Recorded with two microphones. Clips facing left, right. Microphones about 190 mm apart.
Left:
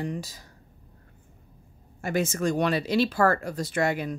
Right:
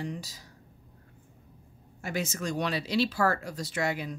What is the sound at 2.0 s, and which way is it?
Speech, 50° left (ahead or behind).